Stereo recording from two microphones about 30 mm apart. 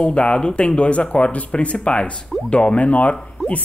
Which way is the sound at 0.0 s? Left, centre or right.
Left.